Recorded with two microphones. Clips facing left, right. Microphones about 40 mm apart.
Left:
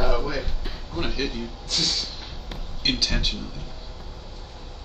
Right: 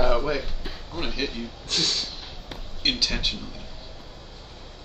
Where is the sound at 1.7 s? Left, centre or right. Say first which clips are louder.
Even; right.